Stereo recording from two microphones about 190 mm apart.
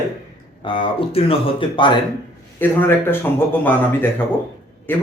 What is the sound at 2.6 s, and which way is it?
Speech, 10° left (ahead or behind).